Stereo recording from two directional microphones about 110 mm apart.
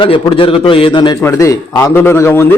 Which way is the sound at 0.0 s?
50° left (ahead or behind).